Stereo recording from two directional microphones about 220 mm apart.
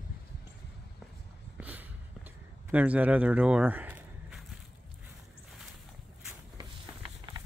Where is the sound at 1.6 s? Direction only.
5° right (ahead or behind).